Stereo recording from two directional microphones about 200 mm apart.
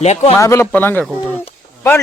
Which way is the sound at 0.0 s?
35° left (ahead or behind).